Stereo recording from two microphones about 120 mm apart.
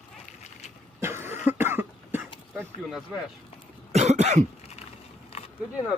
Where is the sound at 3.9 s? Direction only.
65° right (ahead or behind).